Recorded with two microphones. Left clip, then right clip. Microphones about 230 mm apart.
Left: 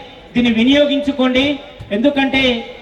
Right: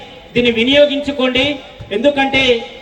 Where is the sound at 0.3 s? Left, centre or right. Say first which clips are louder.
Right 3 dB; right.